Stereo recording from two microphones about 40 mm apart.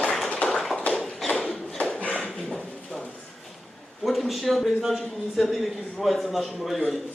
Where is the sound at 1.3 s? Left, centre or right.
Left.